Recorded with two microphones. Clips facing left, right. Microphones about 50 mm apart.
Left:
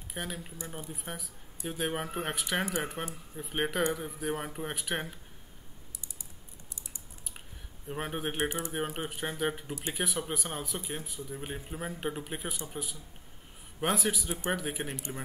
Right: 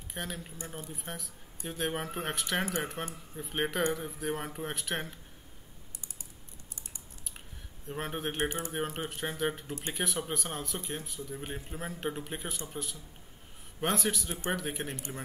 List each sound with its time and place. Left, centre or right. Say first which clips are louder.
0.1 s speech: left 1 dB; centre
7.9 s speech: left 1 dB; centre
8.4 s speech: even; left
8.7 s speech: even; centre